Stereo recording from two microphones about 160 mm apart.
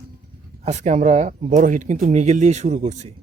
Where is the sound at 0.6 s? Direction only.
45° right (ahead or behind).